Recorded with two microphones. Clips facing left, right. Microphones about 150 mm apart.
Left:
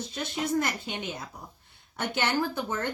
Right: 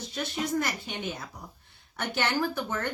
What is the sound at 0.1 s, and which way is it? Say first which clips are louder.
A woman's voice: even; 20° left (ahead or behind).